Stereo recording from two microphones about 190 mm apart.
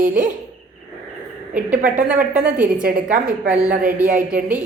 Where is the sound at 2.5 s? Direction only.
50° right (ahead or behind).